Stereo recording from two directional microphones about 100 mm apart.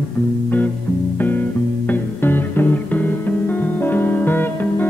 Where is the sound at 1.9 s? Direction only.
20° left (ahead or behind).